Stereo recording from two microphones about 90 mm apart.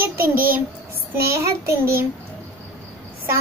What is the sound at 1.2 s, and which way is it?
Speech, 30° right (ahead or behind).